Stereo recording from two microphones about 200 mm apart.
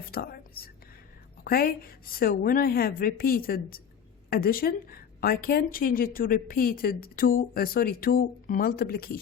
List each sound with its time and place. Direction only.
0.0 s whispering: 50° left (ahead or behind)
1.5 s a woman's voice: 50° left (ahead or behind)